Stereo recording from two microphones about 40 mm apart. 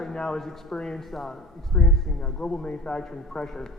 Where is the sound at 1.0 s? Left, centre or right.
Centre.